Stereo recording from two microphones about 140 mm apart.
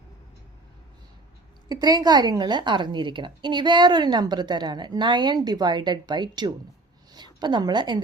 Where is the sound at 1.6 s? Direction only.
30° right (ahead or behind).